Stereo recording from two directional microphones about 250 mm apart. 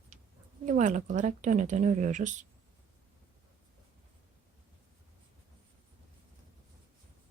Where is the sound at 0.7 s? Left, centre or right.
Right.